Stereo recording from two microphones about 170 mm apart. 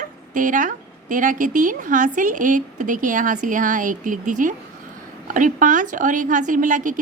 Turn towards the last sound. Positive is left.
turn(degrees=-50)  # may be behind; listen again after turning